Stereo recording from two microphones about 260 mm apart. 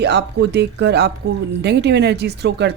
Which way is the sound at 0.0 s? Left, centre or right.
Right.